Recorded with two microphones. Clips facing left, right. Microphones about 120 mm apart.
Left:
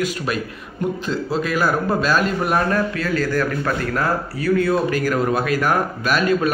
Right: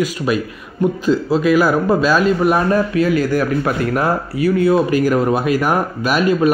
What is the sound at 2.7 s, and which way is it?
Speech, 15° right (ahead or behind).